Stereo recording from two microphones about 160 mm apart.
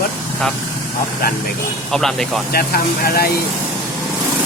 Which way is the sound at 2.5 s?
70° left (ahead or behind).